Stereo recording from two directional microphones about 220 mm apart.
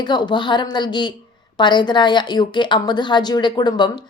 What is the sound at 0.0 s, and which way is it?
Speech, 20° left (ahead or behind).